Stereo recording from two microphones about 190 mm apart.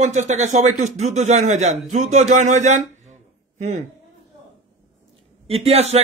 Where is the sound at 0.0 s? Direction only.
40° right (ahead or behind).